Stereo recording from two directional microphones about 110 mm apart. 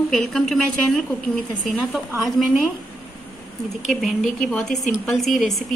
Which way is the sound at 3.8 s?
Centre (ahead or behind).